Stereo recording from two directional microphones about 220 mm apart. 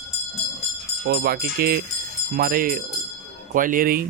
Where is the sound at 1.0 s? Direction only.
45° right (ahead or behind).